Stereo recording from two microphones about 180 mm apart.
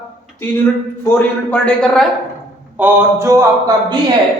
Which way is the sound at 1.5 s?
5° left (ahead or behind).